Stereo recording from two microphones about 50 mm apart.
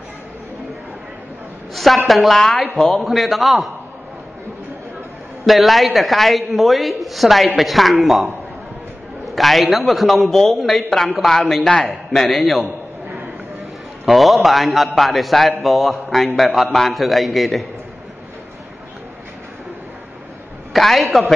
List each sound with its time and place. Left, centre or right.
2.0 s a woman's voice: centre
2.6 s a man's voice: left
2.9 s a woman's voice: centre
5.5 s a woman's voice: centre
9.3 s a woman's voice: centre
14.0 s a woman's voice: centre
20.7 s a woman's voice: centre